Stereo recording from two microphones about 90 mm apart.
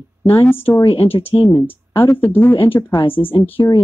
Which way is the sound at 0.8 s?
90° left.